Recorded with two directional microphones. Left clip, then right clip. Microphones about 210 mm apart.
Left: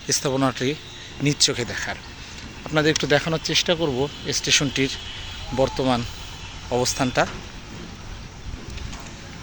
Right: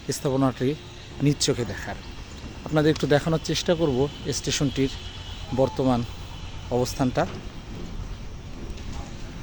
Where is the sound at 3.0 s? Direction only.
20° right (ahead or behind).